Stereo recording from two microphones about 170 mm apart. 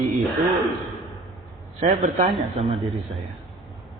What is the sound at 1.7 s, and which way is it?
Speech, 45° right (ahead or behind).